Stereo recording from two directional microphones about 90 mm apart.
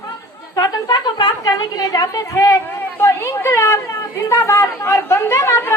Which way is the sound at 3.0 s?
30° left (ahead or behind).